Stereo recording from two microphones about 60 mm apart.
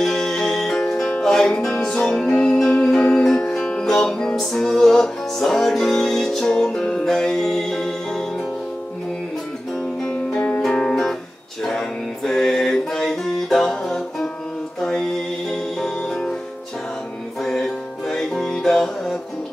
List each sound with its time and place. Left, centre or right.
0.0 s music: centre
10.0 s music: left
17.4 s music: centre